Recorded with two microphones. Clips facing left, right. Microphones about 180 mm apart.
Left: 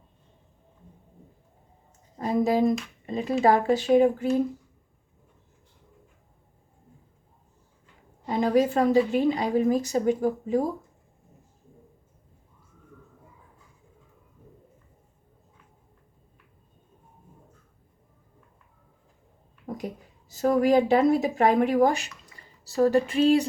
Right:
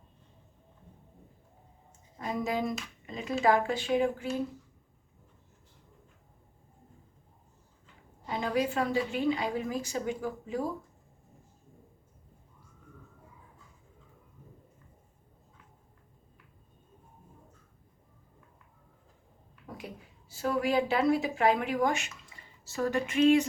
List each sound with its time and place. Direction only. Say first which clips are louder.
2.1 s speech: left 9 dB; 35° left (ahead or behind)
8.3 s speech: left 8 dB; 40° left (ahead or behind)
19.6 s speech: left 9 dB; 40° left (ahead or behind)